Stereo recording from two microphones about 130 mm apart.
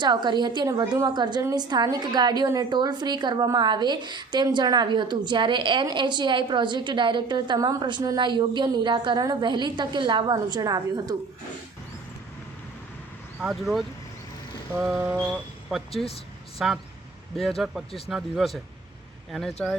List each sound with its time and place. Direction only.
0.0 s a woman's voice: 35° right (ahead or behind)
13.4 s speech: 5° right (ahead or behind)
14.8 s speech: centre (ahead or behind)
16.6 s speech: centre (ahead or behind)